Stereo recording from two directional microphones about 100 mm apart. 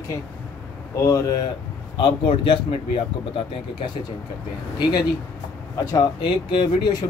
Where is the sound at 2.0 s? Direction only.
60° left (ahead or behind).